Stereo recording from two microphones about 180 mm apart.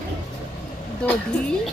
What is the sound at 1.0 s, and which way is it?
Speech, 5° left (ahead or behind).